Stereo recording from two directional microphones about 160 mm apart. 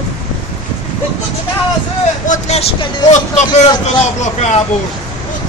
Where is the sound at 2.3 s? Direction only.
45° left (ahead or behind).